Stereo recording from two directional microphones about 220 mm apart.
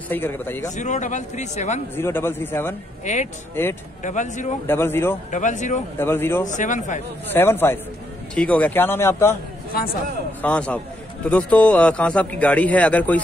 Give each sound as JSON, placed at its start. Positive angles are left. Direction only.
{"t": 0.1, "sound": "a man's voice", "side_deg": 10}
{"t": 0.7, "sound": "speech", "side_deg": 35}
{"t": 2.0, "sound": "a man's voice", "side_deg": 10}
{"t": 3.1, "sound": "speech", "side_deg": 35}
{"t": 3.6, "sound": "a man's voice", "side_deg": 10}
{"t": 4.0, "sound": "speech", "side_deg": 35}
{"t": 4.6, "sound": "a man's voice", "side_deg": 10}
{"t": 5.3, "sound": "speech", "side_deg": 35}
{"t": 5.9, "sound": "a man's voice", "side_deg": 10}
{"t": 6.4, "sound": "speech", "side_deg": 35}
{"t": 7.3, "sound": "a man's voice", "side_deg": 10}
{"t": 10.4, "sound": "a man's voice", "side_deg": 5}